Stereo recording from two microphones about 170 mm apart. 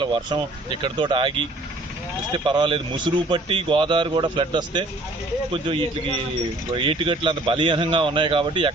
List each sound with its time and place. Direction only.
0.0 s a man's voice: 30° right (ahead or behind)
2.5 s a man's voice: 30° right (ahead or behind)